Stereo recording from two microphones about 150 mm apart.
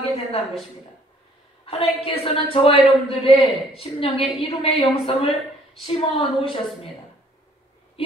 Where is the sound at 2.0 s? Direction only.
35° left (ahead or behind).